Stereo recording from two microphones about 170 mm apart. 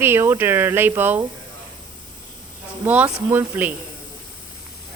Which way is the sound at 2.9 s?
10° right (ahead or behind).